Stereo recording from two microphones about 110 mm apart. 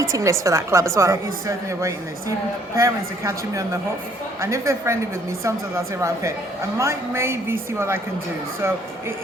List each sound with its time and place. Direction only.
0.0 s a woman's voice: 30° right (ahead or behind)